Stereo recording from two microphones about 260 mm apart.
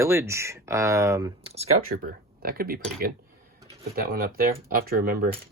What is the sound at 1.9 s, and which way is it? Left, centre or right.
Speech, right.